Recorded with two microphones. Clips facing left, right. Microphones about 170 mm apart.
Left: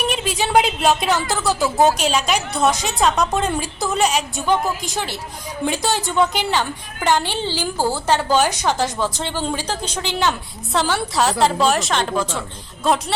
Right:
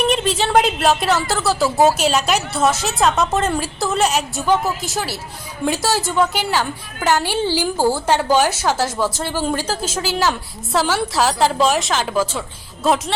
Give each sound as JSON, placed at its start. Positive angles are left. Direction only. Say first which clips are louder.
{"t": 0.1, "sound": "a woman's voice", "louder": "right 2 dB", "side_deg": 5}